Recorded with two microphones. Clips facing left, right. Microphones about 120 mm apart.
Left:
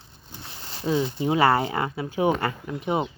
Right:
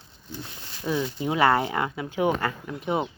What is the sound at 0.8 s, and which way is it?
Speech, 20° left (ahead or behind).